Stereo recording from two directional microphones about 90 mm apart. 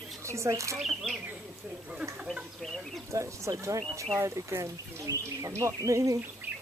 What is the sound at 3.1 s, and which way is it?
Speech, 35° right (ahead or behind).